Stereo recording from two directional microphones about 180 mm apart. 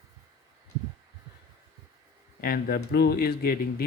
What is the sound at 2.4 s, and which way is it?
Speech, 55° left (ahead or behind).